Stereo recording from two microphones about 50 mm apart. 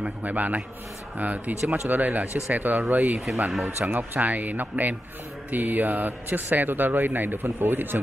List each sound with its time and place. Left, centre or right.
0.0 s speech: right